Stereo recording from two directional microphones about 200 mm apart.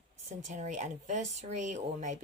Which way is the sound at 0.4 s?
35° right (ahead or behind).